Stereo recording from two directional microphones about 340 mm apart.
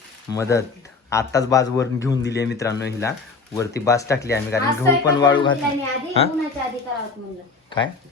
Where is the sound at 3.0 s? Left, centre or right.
Centre.